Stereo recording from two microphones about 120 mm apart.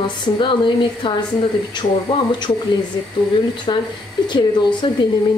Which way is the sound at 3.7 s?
45° left (ahead or behind).